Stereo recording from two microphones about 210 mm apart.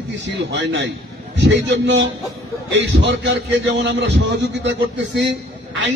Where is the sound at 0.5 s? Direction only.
60° right (ahead or behind).